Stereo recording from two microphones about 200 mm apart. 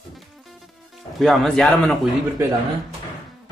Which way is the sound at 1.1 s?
Centre (ahead or behind).